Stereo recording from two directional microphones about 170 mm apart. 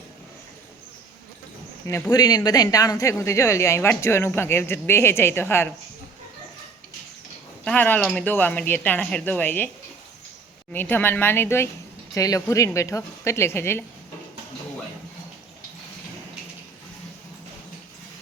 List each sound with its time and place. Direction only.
2.0 s speech: 25° left (ahead or behind)
7.6 s speech: 10° left (ahead or behind)
10.7 s speech: 10° left (ahead or behind)